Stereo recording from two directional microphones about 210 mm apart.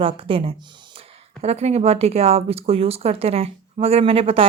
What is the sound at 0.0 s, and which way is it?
A woman's voice, 25° right (ahead or behind).